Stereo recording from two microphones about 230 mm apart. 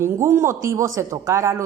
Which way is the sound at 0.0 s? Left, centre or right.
Centre.